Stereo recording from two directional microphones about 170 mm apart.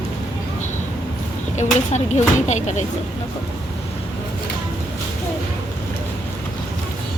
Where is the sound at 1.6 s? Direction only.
45° left (ahead or behind).